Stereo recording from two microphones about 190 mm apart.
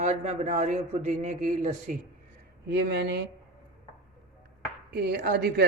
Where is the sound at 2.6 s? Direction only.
65° right (ahead or behind).